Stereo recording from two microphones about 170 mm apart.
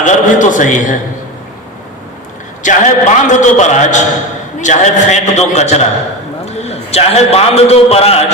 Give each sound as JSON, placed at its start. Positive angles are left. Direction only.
{"t": 0.0, "sound": "a man's voice", "side_deg": 45}
{"t": 2.6, "sound": "a man's voice", "side_deg": 45}